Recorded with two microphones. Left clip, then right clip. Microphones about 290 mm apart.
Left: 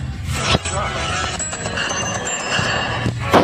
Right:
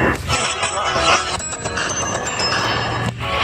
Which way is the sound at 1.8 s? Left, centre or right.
Right.